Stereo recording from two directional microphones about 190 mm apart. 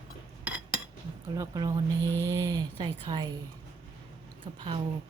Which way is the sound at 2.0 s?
15° left (ahead or behind).